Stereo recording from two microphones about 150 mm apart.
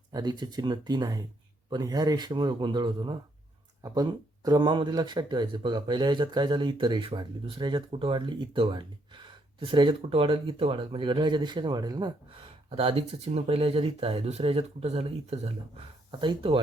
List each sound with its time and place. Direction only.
0.1 s a man's voice: 30° right (ahead or behind)